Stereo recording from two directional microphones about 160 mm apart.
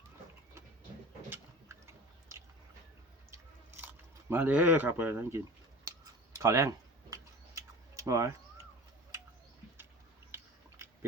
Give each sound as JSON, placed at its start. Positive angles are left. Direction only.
{"t": 1.3, "sound": "a sound", "side_deg": -15}
{"t": 4.3, "sound": "speech", "side_deg": -10}
{"t": 6.4, "sound": "typing", "side_deg": -20}